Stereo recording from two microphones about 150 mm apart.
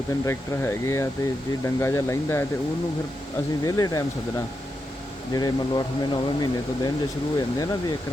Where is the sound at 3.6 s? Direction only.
25° left (ahead or behind).